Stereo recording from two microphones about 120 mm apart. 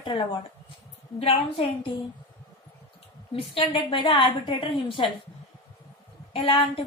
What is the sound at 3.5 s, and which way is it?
A woman's voice, 50° left (ahead or behind).